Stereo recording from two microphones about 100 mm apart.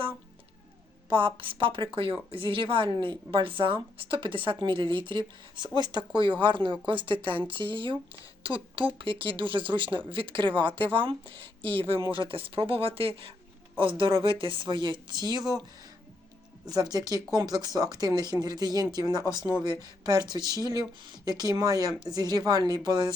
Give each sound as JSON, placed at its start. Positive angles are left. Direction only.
{"t": 1.1, "sound": "a woman's voice", "side_deg": -60}
{"t": 12.0, "sound": "speech", "side_deg": 40}
{"t": 12.3, "sound": "a woman's voice", "side_deg": -65}